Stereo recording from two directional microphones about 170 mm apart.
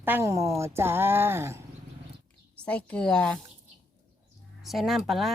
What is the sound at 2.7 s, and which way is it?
Speech, 5° left (ahead or behind).